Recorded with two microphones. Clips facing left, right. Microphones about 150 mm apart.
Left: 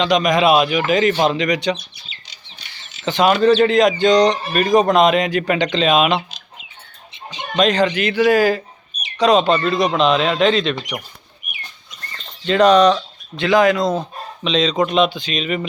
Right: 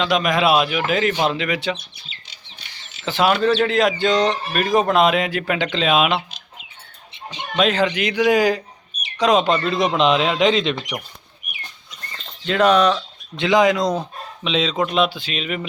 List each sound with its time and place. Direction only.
0.0 s a man's voice: 5° right (ahead or behind)
3.0 s a man's voice: 5° right (ahead or behind)
7.5 s speech: 5° right (ahead or behind)
12.5 s speech: 5° right (ahead or behind)
13.3 s a man's voice: 20° right (ahead or behind)
14.4 s a man's voice: 5° right (ahead or behind)